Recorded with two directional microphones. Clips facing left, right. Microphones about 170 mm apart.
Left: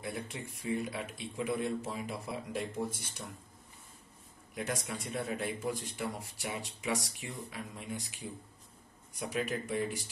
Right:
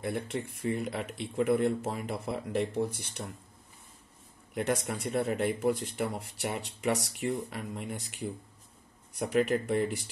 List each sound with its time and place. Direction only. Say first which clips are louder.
0.0 s speech: right 7 dB; 60° right (ahead or behind)
4.6 s speech: right 7 dB; 60° right (ahead or behind)